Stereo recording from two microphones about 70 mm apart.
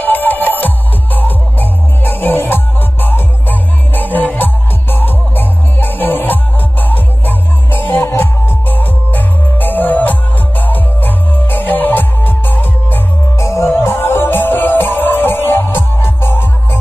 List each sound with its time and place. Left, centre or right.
0.0 s music: left
13.4 s music: left
13.7 s music: left